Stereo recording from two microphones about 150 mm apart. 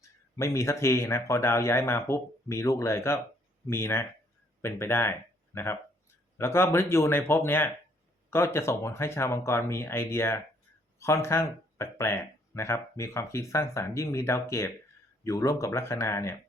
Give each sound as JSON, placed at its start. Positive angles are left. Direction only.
{"t": 0.3, "sound": "speech", "side_deg": 20}